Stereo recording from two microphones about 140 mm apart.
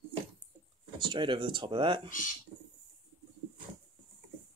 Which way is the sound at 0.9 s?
35° right (ahead or behind).